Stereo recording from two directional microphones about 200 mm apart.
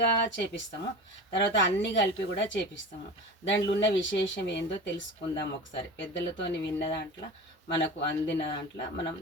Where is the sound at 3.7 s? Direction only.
65° left (ahead or behind).